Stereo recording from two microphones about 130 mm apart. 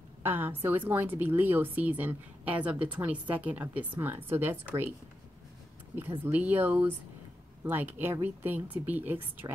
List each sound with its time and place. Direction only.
0.2 s a woman's voice: 15° right (ahead or behind)
6.2 s a woman's voice: 15° right (ahead or behind)